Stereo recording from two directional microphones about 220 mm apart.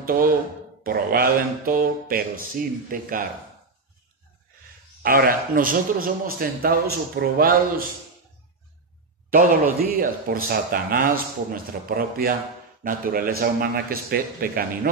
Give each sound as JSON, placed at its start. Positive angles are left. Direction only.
{"t": 0.0, "sound": "speech", "side_deg": -40}
{"t": 5.0, "sound": "speech", "side_deg": -40}
{"t": 9.3, "sound": "a man's voice", "side_deg": -40}